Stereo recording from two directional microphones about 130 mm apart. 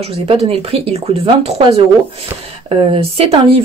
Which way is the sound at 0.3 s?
45° right (ahead or behind).